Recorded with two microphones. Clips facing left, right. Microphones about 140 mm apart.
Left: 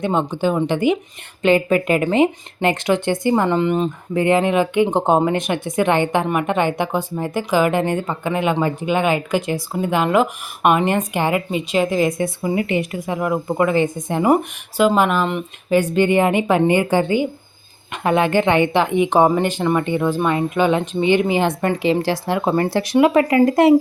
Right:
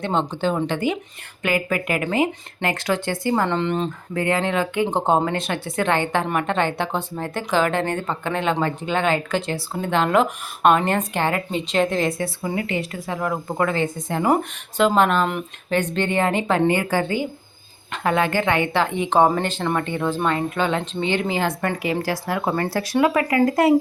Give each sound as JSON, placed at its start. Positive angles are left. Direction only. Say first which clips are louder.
{"t": 0.0, "sound": "speech", "louder": "left 3 dB", "side_deg": 10}